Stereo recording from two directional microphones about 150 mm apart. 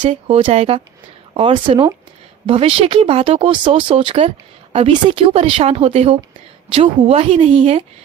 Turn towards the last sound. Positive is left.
turn(degrees=-40)  # may be behind; listen again after turning